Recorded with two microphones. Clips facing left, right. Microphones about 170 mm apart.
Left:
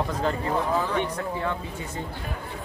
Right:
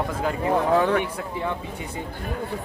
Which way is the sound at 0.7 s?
65° right (ahead or behind).